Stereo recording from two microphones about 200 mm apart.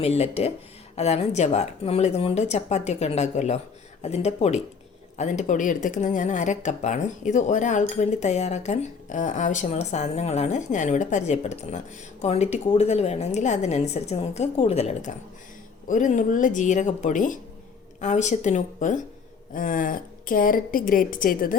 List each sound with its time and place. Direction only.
0.0 s a woman's voice: 30° left (ahead or behind)